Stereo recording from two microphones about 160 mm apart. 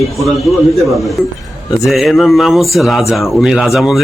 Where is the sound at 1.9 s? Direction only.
Centre (ahead or behind).